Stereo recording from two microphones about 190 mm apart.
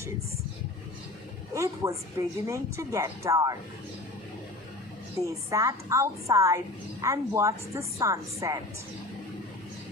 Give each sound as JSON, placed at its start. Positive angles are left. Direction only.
{"t": 1.5, "sound": "a woman's voice", "side_deg": -15}
{"t": 5.2, "sound": "a woman's voice", "side_deg": -15}